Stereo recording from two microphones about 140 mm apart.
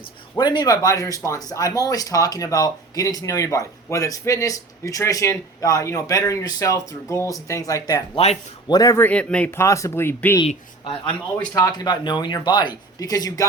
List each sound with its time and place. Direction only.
0.3 s speech: 30° left (ahead or behind)
8.1 s speech: 50° left (ahead or behind)
8.6 s speech: 30° left (ahead or behind)
9.0 s speech: 10° left (ahead or behind)
9.6 s speech: 20° left (ahead or behind)
11.5 s speech: 30° left (ahead or behind)